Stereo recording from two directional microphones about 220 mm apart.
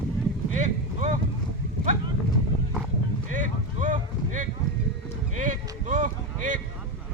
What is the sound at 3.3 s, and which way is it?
Boat, 35° right (ahead or behind).